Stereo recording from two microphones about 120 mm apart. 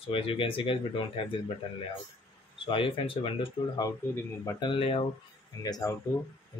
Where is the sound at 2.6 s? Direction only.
45° left (ahead or behind).